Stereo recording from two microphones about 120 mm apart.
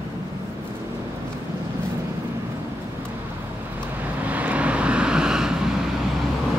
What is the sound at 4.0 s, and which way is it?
Vehicle, 15° right (ahead or behind).